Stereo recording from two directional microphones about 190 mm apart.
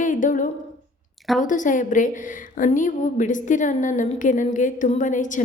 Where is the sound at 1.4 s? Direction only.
40° left (ahead or behind).